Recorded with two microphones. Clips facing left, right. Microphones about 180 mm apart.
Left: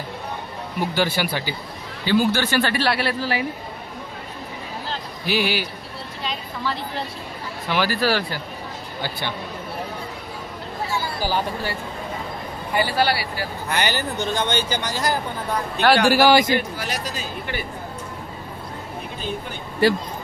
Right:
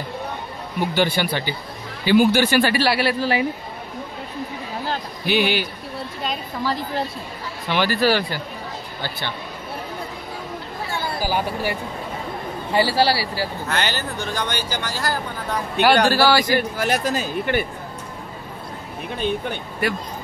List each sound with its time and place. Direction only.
0.7 s speech: 5° left (ahead or behind)
2.0 s speech: 15° right (ahead or behind)
5.2 s speech: centre (ahead or behind)
6.2 s a woman's voice: 40° right (ahead or behind)
7.7 s speech: centre (ahead or behind)
11.2 s speech: 10° right (ahead or behind)
12.7 s speech: 30° right (ahead or behind)
13.7 s a man's voice: 15° left (ahead or behind)
16.7 s speech: 50° right (ahead or behind)
19.8 s speech: 30° left (ahead or behind)